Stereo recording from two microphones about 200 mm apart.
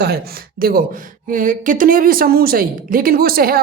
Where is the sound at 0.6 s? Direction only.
45° right (ahead or behind).